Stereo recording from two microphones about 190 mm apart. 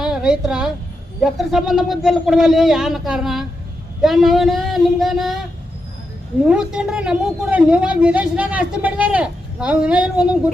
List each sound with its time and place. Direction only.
0.0 s a woman's voice: 5° right (ahead or behind)
6.5 s a woman's voice: 5° right (ahead or behind)